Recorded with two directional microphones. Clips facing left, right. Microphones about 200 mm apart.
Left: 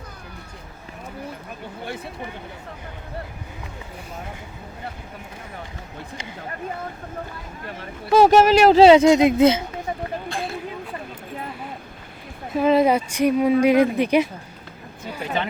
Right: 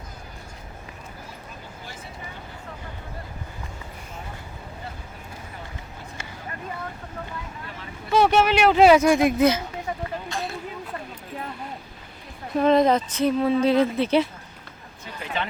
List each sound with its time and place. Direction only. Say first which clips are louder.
8.2 s speech: left 5 dB; 40° left (ahead or behind)
12.5 s speech: left 1 dB; 5° left (ahead or behind)